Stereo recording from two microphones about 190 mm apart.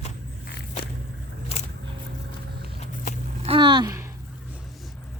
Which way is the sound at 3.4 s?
30° right (ahead or behind).